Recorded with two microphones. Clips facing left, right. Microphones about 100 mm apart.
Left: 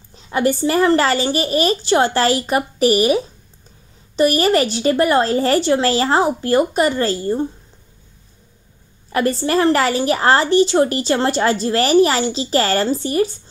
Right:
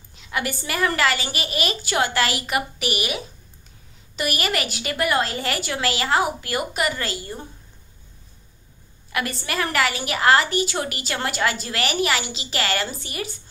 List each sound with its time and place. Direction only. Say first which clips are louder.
0.1 s a woman's voice: left 10 dB; 35° left (ahead or behind)
9.1 s a woman's voice: left 10 dB; 35° left (ahead or behind)